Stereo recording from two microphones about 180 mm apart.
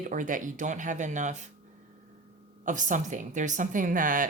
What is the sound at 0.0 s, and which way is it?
Speech, 45° right (ahead or behind).